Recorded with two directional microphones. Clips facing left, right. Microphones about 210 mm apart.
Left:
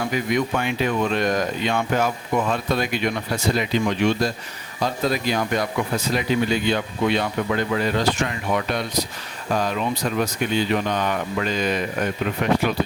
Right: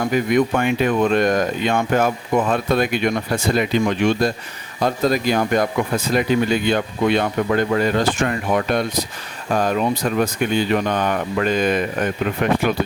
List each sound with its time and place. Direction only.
0.0 s speech: 50° right (ahead or behind)